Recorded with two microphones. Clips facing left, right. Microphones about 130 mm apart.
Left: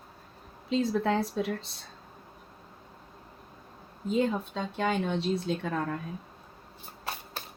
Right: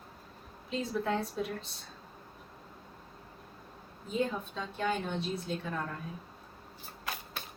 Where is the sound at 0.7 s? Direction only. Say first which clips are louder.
Left 6 dB; 90° left.